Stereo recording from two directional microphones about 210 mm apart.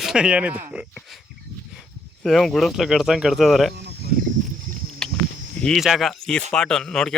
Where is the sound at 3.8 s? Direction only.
50° right (ahead or behind).